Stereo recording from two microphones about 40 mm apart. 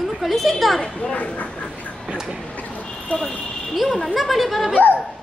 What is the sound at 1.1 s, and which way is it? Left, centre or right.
Speech, left.